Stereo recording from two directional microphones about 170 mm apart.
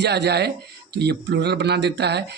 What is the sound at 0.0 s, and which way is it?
Speech, 80° right.